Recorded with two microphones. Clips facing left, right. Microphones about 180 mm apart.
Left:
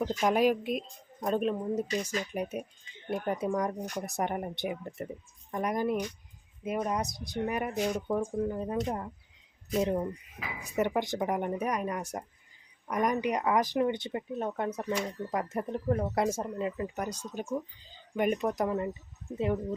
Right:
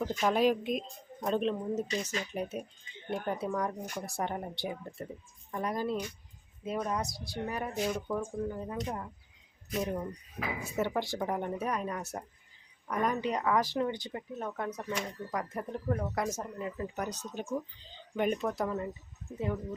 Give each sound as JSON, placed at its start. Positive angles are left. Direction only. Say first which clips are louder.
{"t": 0.0, "sound": "speech", "louder": "left 2 dB", "side_deg": 15}
{"t": 10.6, "sound": "speech", "louder": "left 4 dB", "side_deg": 15}
{"t": 16.7, "sound": "speech", "louder": "left 2 dB", "side_deg": 10}